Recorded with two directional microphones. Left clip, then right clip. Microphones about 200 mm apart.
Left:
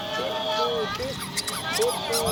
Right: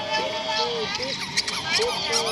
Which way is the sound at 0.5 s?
40° left (ahead or behind).